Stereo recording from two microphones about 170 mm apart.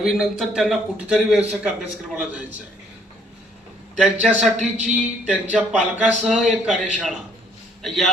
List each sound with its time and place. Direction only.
0.0 s a man's voice: centre (ahead or behind)
3.9 s a man's voice: 5° right (ahead or behind)
4.5 s a man's voice: 45° right (ahead or behind)
5.3 s a man's voice: 5° right (ahead or behind)